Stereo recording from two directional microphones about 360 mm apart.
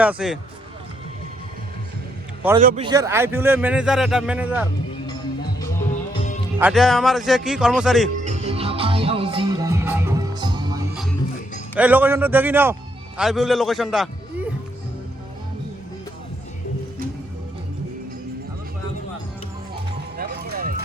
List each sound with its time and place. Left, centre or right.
0.0 s a man's voice: centre
2.6 s a man's voice: centre
6.6 s a man's voice: centre
8.2 s music: centre
11.7 s a man's voice: centre
20.1 s music: right